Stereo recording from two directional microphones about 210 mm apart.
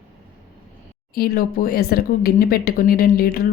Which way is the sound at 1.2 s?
45° left (ahead or behind).